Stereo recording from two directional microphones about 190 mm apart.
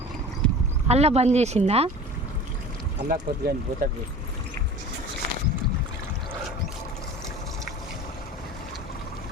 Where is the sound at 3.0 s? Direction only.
50° right (ahead or behind).